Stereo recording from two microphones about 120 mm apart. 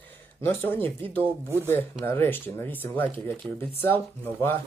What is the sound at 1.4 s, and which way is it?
Speech, 20° right (ahead or behind).